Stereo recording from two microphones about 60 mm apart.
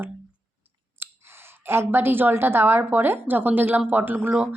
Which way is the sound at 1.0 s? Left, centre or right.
Right.